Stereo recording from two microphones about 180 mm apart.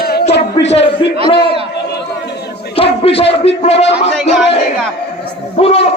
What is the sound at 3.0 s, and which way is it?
Speech, 30° left (ahead or behind).